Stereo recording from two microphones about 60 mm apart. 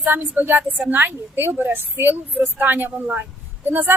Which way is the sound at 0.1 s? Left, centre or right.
Right.